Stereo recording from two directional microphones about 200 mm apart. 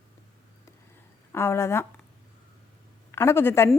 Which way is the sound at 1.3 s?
10° left (ahead or behind).